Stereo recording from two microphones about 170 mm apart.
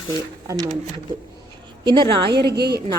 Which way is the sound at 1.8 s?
25° right (ahead or behind).